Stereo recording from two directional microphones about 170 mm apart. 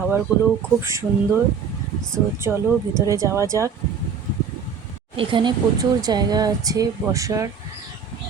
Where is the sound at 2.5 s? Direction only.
5° right (ahead or behind).